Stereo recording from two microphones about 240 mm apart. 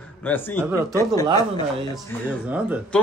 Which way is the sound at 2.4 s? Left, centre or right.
Centre.